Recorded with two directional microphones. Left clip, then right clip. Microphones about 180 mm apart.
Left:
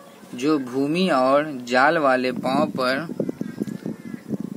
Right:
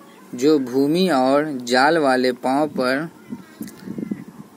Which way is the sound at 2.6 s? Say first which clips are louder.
Right 2 dB; 25° right (ahead or behind).